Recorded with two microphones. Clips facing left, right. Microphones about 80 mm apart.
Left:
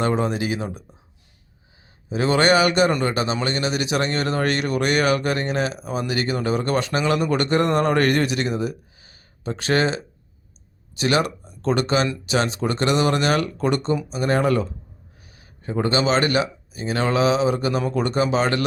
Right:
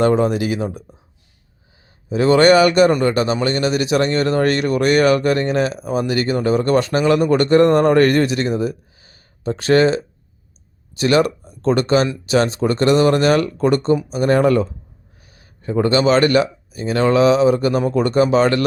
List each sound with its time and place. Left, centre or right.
0.0 s speech: right
2.0 s speech: right